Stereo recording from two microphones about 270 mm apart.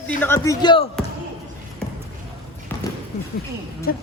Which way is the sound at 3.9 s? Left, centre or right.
Left.